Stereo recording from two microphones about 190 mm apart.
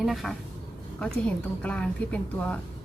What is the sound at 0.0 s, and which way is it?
Speech, centre (ahead or behind).